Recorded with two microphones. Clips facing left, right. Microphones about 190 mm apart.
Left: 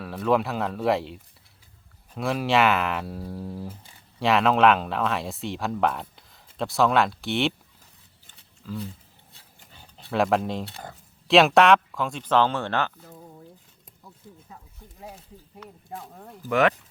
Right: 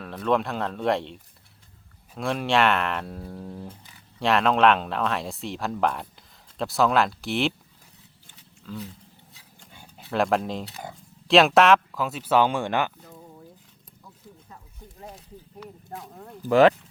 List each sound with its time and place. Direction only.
0.0 s speech: 5° left (ahead or behind)
8.7 s speech: 5° left (ahead or behind)
9.7 s dog: 5° right (ahead or behind)
11.3 s speech: centre (ahead or behind)
16.5 s speech: 30° right (ahead or behind)